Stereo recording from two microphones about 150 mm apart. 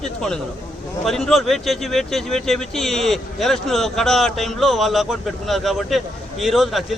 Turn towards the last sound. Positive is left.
turn(degrees=0)  # may be behind; listen again after turning